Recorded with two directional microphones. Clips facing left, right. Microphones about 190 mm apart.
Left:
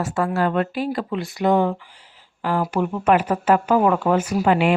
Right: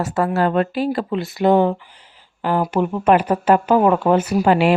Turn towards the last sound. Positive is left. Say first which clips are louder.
# right 3 dB
turn(degrees=-35)  # may be behind; listen again after turning